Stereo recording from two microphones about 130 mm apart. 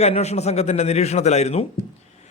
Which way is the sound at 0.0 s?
55° left (ahead or behind).